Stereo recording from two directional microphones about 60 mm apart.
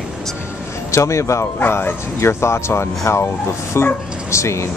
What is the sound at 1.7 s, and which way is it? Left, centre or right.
Speech, left.